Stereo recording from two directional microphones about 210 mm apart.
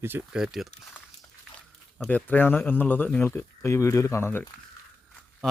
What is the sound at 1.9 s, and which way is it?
Speech, 5° left (ahead or behind).